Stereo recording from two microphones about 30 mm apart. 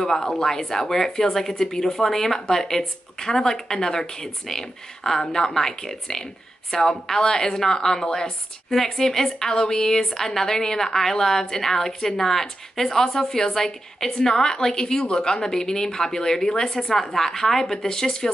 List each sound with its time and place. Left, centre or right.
0.0 s a woman's voice: centre